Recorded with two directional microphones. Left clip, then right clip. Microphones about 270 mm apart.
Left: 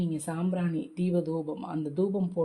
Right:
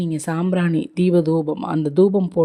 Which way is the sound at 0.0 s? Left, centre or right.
Right.